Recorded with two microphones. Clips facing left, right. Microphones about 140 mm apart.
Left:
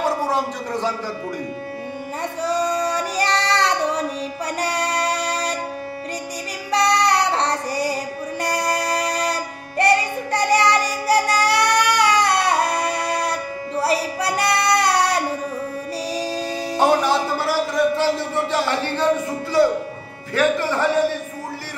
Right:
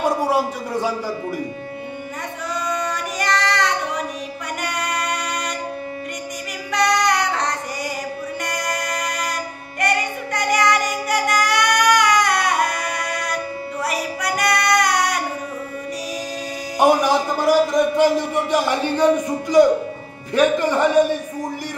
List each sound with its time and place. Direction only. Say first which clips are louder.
0.0 s a sound: right 2 dB; 10° right (ahead or behind)
2.4 s child singing: left 4 dB; 35° left (ahead or behind)
4.6 s music: left 3 dB; 35° left (ahead or behind)
6.7 s child singing: left 1 dB; 30° left (ahead or behind)
8.5 s music: left 6 dB; 30° left (ahead or behind)
16.7 s music: right 2 dB; 15° right (ahead or behind)
19.6 s speech: right 4 dB; 15° right (ahead or behind)